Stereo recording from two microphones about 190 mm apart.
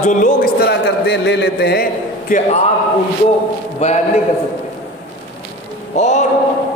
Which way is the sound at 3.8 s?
35° left (ahead or behind).